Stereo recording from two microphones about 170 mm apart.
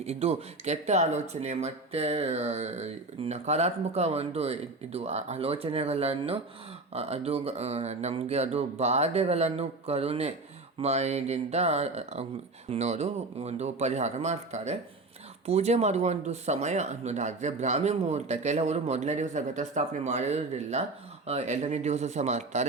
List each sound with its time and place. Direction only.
0.0 s speech: 40° right (ahead or behind)